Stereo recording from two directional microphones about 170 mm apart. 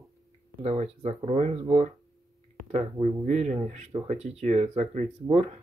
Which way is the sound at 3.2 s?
45° right (ahead or behind).